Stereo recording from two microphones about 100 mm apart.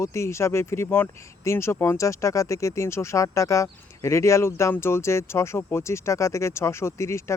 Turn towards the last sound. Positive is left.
turn(degrees=30)  # may be behind; listen again after turning